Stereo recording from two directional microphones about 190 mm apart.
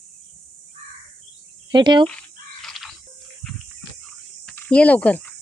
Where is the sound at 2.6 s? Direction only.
Centre (ahead or behind).